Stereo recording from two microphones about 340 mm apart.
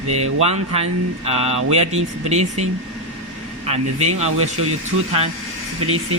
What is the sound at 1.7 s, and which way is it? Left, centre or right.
Speech, centre.